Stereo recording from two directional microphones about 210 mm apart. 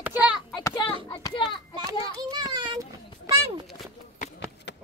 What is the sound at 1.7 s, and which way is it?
A child's voice, 20° right (ahead or behind).